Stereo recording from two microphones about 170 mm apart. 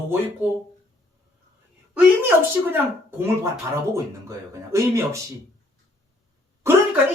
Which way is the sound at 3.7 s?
15° right (ahead or behind).